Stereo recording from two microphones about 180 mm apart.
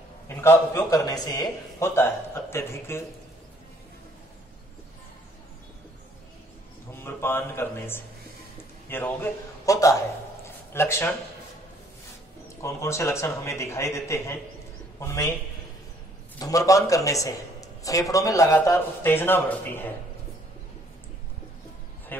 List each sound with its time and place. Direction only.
0.3 s a man's voice: 15° left (ahead or behind)
6.9 s a man's voice: 10° left (ahead or behind)
12.6 s a man's voice: 15° left (ahead or behind)
16.3 s a man's voice: 20° left (ahead or behind)